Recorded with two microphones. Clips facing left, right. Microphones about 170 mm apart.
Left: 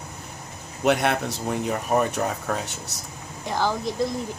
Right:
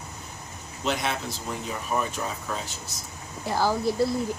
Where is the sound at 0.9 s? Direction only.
65° left (ahead or behind).